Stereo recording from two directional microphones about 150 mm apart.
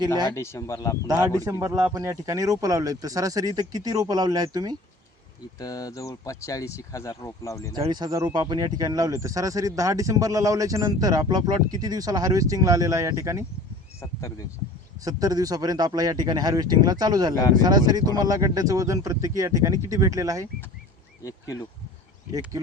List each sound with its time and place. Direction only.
0.3 s speech: 20° left (ahead or behind)
1.5 s speech: 20° right (ahead or behind)
5.5 s speech: 25° left (ahead or behind)
7.9 s speech: 30° right (ahead or behind)
14.0 s speech: 20° left (ahead or behind)
15.0 s speech: 25° right (ahead or behind)
21.2 s speech: 20° left (ahead or behind)
22.3 s speech: 25° right (ahead or behind)